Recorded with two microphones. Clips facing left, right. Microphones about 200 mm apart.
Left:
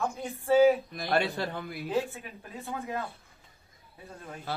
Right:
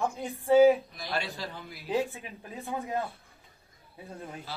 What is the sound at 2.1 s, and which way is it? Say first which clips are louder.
Speech: even; 15° right (ahead or behind).